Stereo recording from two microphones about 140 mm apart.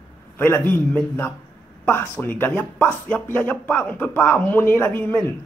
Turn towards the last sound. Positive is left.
turn(degrees=15)  # may be behind; listen again after turning